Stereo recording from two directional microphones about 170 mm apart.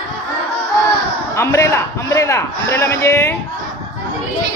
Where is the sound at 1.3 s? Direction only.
15° left (ahead or behind).